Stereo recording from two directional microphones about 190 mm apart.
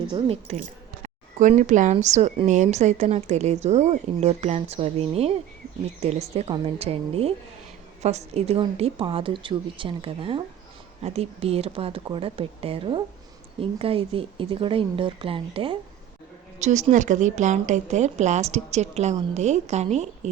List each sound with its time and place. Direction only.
0.1 s a woman's voice: 30° right (ahead or behind)
16.6 s speech: 40° right (ahead or behind)